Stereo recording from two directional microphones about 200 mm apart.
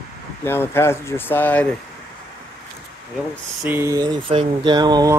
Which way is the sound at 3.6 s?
15° right (ahead or behind).